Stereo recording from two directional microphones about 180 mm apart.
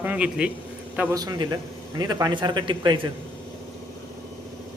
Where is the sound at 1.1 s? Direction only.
20° right (ahead or behind).